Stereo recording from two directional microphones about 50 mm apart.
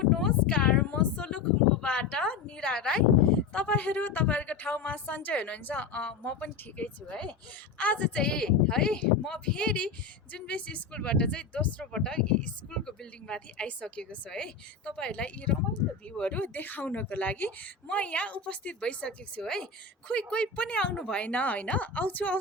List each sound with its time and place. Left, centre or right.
0.0 s a sound: centre
3.5 s a woman's voice: left
8.2 s a woman's voice: centre
20.1 s speech: left